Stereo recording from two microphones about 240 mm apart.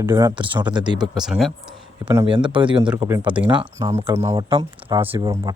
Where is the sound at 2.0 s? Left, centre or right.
Centre.